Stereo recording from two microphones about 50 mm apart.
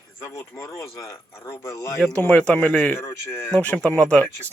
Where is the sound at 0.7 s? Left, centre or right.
Left.